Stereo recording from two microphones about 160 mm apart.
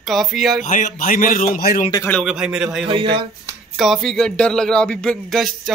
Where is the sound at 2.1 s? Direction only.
Centre (ahead or behind).